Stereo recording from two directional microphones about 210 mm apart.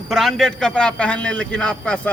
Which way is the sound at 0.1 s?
Centre (ahead or behind).